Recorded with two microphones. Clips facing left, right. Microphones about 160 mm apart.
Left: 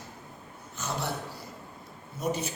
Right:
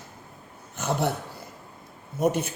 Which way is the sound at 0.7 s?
60° right (ahead or behind).